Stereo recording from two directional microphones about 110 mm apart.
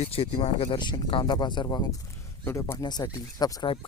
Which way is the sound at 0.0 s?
65° left (ahead or behind).